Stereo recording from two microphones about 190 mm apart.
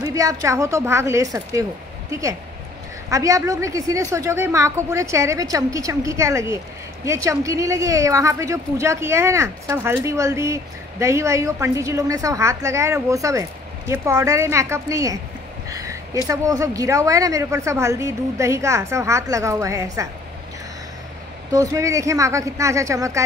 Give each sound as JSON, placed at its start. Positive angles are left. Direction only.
{"t": 0.0, "sound": "speech", "side_deg": -15}
{"t": 3.1, "sound": "speech", "side_deg": -15}
{"t": 15.7, "sound": "a sound", "side_deg": -15}
{"t": 16.3, "sound": "speech", "side_deg": -20}
{"t": 21.5, "sound": "speech", "side_deg": -15}